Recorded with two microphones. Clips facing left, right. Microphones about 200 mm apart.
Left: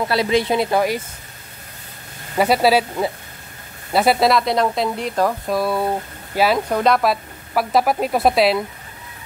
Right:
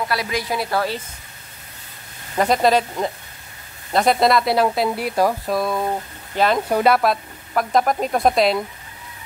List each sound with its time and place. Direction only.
0.1 s a woman's voice: 25° left (ahead or behind)
2.3 s speech: 5° left (ahead or behind); by 5.3 s 10° right (ahead or behind)
5.5 s speech: 5° left (ahead or behind)
6.7 s speech: 5° right (ahead or behind)